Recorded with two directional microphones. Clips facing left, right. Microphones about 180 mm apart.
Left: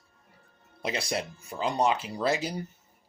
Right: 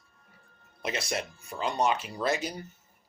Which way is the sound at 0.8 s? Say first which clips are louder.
Left 1 dB; 30° left (ahead or behind).